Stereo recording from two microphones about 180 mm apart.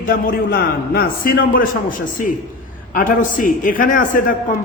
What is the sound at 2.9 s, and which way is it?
A man's voice, 50° left (ahead or behind).